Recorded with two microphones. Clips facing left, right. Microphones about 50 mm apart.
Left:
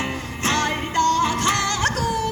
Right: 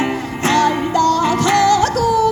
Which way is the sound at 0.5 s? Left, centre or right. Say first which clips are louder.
Right 8 dB; left.